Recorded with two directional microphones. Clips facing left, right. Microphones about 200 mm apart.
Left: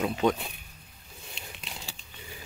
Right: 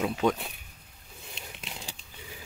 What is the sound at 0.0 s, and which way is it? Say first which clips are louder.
Speech: left 1 dB; centre (ahead or behind).